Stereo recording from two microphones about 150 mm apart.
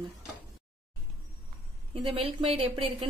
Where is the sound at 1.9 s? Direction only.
40° right (ahead or behind).